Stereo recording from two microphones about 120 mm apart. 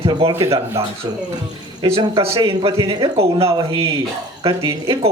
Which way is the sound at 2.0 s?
50° right (ahead or behind).